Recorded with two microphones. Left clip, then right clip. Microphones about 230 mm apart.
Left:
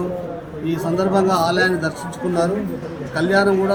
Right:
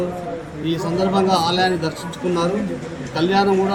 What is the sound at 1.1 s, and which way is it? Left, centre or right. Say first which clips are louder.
Speech: even; centre.